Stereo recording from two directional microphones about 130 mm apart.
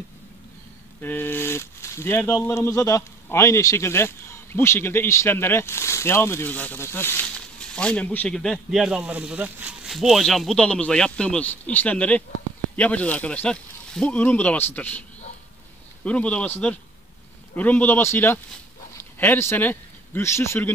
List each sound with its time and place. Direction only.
1.0 s a man's voice: 15° left (ahead or behind)